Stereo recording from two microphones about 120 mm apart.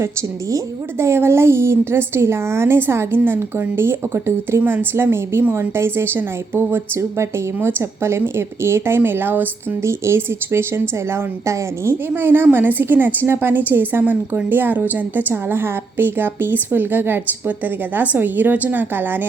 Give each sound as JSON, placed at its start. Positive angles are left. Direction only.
{"t": 0.0, "sound": "a woman's voice", "side_deg": -20}